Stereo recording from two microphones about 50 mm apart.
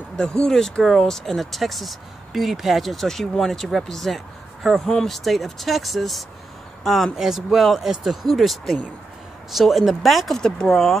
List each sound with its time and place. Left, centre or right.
0.2 s speech: centre